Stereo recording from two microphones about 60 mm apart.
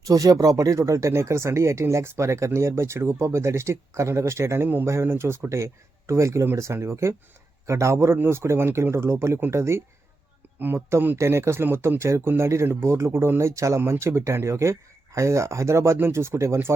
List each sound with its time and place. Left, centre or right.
0.0 s speech: right